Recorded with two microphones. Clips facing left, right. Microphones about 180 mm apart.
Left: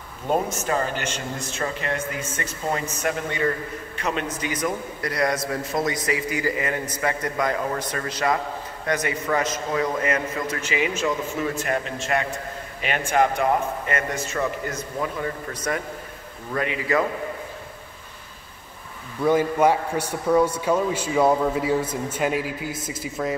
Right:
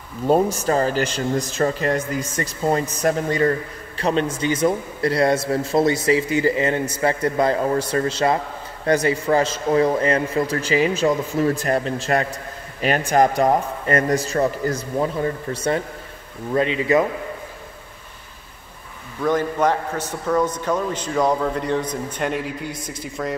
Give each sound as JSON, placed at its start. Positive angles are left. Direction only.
{"t": 0.3, "sound": "a man's voice", "side_deg": -35}
{"t": 19.2, "sound": "a man's voice", "side_deg": 10}